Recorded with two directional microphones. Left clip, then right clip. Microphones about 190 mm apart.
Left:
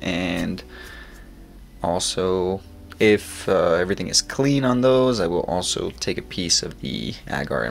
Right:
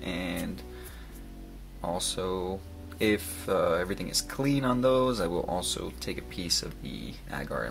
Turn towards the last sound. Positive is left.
turn(degrees=25)  # may be behind; listen again after turning